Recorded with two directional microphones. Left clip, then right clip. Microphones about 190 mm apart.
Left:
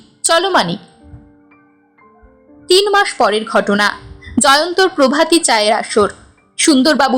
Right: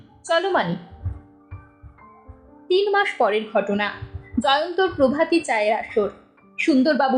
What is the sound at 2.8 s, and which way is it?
A woman's voice, 25° left (ahead or behind).